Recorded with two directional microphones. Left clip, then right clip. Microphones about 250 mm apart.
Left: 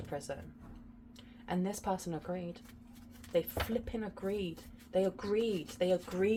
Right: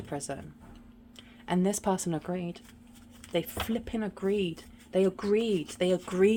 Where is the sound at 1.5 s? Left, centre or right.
Right.